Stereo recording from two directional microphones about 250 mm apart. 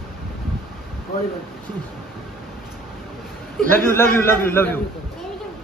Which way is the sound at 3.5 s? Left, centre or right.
Centre.